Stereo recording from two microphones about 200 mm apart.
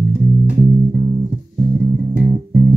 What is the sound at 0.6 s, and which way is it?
Music, 45° right (ahead or behind).